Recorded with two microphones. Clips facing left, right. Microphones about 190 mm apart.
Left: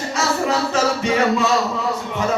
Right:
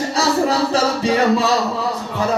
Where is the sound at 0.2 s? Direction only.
35° right (ahead or behind).